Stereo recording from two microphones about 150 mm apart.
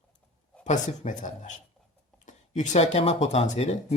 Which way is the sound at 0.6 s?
55° left (ahead or behind).